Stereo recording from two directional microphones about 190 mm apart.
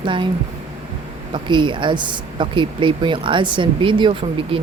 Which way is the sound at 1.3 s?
25° right (ahead or behind).